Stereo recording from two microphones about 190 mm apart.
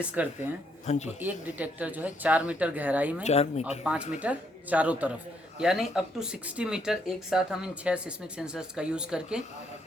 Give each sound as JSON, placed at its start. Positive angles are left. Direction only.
{"t": 0.2, "sound": "speech", "side_deg": -5}
{"t": 0.9, "sound": "speech", "side_deg": 35}
{"t": 1.2, "sound": "speech", "side_deg": -10}
{"t": 3.2, "sound": "speech", "side_deg": 35}
{"t": 3.9, "sound": "speech", "side_deg": -5}